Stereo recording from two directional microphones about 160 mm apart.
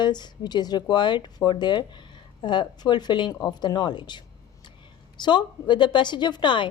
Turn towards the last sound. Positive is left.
turn(degrees=30)  # may be behind; listen again after turning